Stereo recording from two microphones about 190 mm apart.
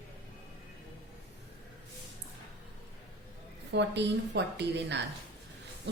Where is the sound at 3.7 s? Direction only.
65° right (ahead or behind).